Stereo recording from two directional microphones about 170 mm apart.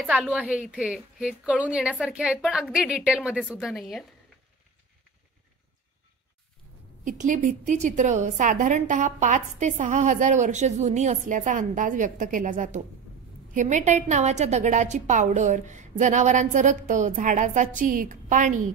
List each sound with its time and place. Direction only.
0.0 s a woman's voice: 5° right (ahead or behind)
7.1 s a woman's voice: 50° right (ahead or behind)